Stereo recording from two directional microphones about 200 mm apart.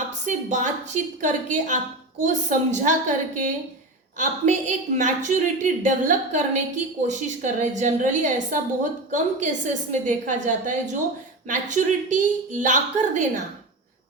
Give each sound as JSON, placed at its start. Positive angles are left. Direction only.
{"t": 0.3, "sound": "a woman's voice", "side_deg": -40}